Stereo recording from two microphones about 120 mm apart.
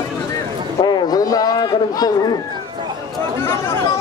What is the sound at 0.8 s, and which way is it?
Speech, 35° left (ahead or behind).